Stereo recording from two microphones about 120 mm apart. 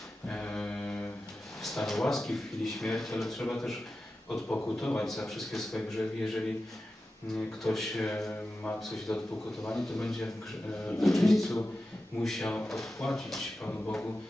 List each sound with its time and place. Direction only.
0.3 s a sound: 10° left (ahead or behind)
1.6 s speech: centre (ahead or behind)
8.3 s speech: 15° left (ahead or behind)
8.8 s speech: 5° left (ahead or behind)
13.7 s speech: 15° left (ahead or behind)